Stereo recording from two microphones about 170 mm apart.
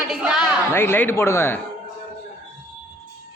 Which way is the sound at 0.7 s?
15° left (ahead or behind).